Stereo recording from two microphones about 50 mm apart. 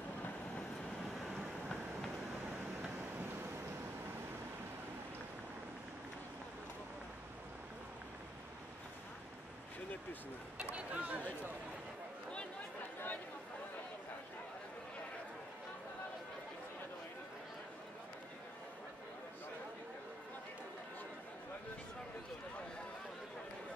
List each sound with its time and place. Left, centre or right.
10.7 s speech: right